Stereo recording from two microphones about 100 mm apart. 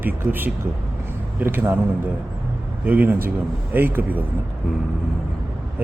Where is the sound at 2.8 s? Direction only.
20° right (ahead or behind).